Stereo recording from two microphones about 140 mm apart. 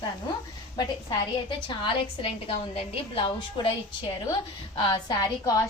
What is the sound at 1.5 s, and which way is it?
A woman's voice, 35° left (ahead or behind).